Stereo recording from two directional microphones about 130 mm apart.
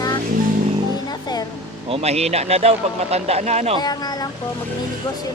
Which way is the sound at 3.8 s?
30° left (ahead or behind).